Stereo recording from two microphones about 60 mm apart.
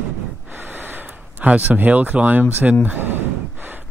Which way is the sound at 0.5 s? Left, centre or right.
Right.